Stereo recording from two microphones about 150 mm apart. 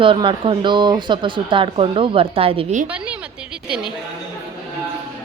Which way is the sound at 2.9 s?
10° right (ahead or behind).